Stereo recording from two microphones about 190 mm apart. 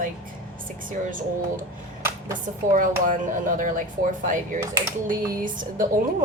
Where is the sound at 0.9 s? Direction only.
45° right (ahead or behind).